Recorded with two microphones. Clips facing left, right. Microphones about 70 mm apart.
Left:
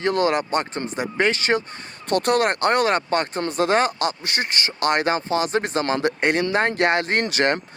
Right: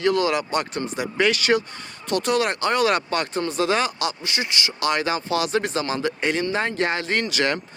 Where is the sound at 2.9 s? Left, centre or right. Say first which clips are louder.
Left 1 dB; left.